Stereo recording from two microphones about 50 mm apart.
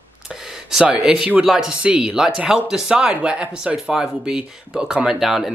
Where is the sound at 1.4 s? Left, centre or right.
Centre.